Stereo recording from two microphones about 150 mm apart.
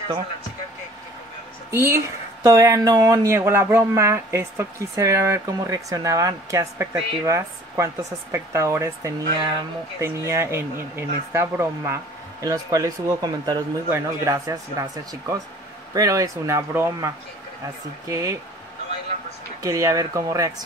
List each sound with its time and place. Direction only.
1.7 s speech: 15° right (ahead or behind)
19.6 s speech: 20° right (ahead or behind)